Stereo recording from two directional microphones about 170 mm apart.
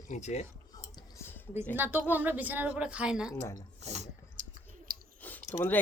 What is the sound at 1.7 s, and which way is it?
A woman's voice, 10° right (ahead or behind).